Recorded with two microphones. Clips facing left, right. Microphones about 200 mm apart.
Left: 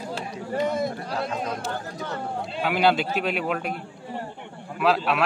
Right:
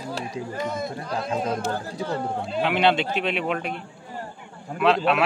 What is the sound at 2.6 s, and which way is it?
Speech, 5° left (ahead or behind).